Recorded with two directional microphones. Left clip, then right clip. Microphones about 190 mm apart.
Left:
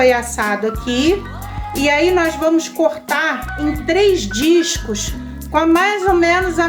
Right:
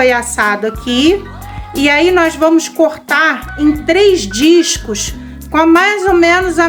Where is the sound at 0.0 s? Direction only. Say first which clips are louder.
Right 3 dB; 30° right (ahead or behind).